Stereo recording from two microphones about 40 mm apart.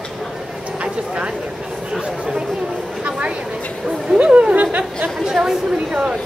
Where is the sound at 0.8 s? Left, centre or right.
Right.